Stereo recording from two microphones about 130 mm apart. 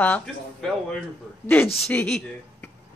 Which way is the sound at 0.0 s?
10° left (ahead or behind).